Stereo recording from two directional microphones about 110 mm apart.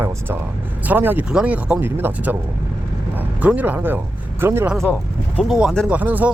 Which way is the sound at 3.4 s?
15° right (ahead or behind).